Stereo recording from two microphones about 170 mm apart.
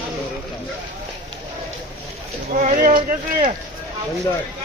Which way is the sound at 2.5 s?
45° right (ahead or behind).